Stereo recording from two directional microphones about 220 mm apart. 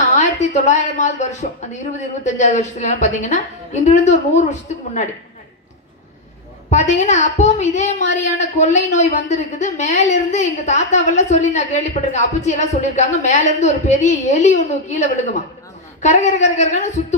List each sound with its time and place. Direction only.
0.2 s a woman's voice: 30° left (ahead or behind)
6.7 s a woman's voice: 30° left (ahead or behind)